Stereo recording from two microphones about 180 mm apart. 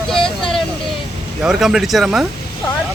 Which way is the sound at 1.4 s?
Centre (ahead or behind).